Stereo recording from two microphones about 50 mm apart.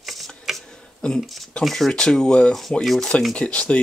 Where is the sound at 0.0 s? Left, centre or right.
Centre.